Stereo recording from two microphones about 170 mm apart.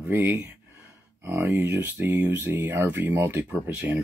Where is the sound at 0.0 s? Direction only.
10° right (ahead or behind).